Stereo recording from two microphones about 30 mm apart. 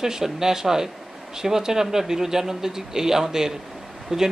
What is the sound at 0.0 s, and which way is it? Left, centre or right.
Speech, centre.